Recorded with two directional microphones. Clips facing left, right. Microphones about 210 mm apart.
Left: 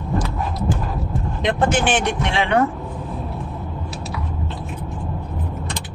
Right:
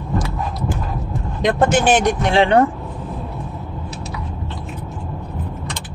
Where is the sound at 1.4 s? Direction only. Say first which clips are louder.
Right 4 dB; 40° right (ahead or behind).